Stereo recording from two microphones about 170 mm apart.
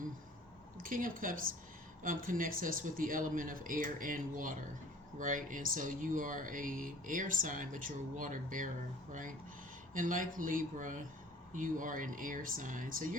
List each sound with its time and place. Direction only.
0.8 s speech: 55° right (ahead or behind)
9.9 s speech: 50° right (ahead or behind)